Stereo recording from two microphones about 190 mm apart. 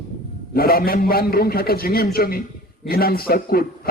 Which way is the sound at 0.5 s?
50° left (ahead or behind).